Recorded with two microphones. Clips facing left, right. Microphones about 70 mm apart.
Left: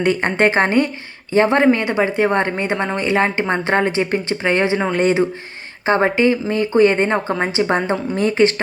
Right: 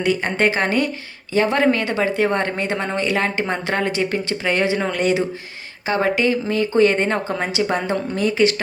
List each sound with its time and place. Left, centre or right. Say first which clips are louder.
0.0 s a woman's voice: left 3 dB; left
2.7 s speech: left 2 dB; centre
3.0 s a woman's voice: left 4 dB; left